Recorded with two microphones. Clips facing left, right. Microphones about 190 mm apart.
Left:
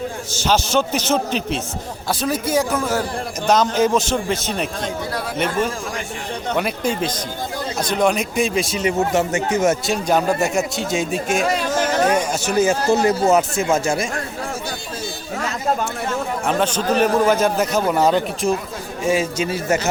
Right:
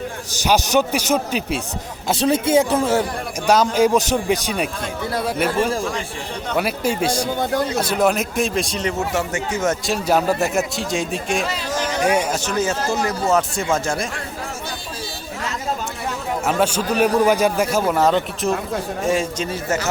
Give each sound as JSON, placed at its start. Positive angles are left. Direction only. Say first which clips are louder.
{"t": 0.4, "sound": "a man's voice", "louder": "right 1 dB", "side_deg": -15}
{"t": 2.0, "sound": "speech", "louder": "right 4 dB", "side_deg": -25}
{"t": 3.4, "sound": "a man's voice", "louder": "right 1 dB", "side_deg": -10}
{"t": 6.6, "sound": "a man's voice", "louder": "right 2 dB", "side_deg": -5}
{"t": 8.9, "sound": "speech", "louder": "left 7 dB", "side_deg": 20}
{"t": 9.6, "sound": "a man's voice", "louder": "left 2 dB", "side_deg": 0}
{"t": 11.8, "sound": "a sound", "louder": "left 3 dB", "side_deg": 50}
{"t": 12.0, "sound": "a man's voice", "louder": "even", "side_deg": -10}
{"t": 12.5, "sound": "speech", "louder": "left 4 dB", "side_deg": 10}
{"t": 12.9, "sound": "speech", "louder": "left 5 dB", "side_deg": 25}
{"t": 13.3, "sound": "speech", "louder": "left 2 dB", "side_deg": 10}
{"t": 16.5, "sound": "a man's voice", "louder": "even", "side_deg": -10}